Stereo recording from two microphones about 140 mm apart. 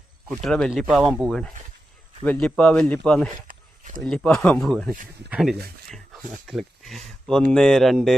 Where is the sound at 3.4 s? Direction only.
70° right (ahead or behind).